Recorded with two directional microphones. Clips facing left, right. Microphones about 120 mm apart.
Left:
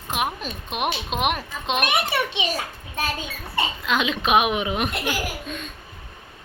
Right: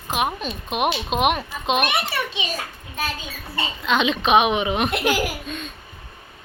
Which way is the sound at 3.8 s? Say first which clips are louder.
Right 5 dB; 5° left (ahead or behind).